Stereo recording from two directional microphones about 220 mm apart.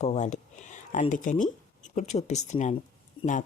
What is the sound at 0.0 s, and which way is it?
Speech, 30° left (ahead or behind).